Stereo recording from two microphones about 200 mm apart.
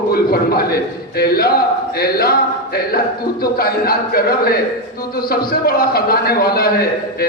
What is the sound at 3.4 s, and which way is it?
A man's voice, 50° left (ahead or behind).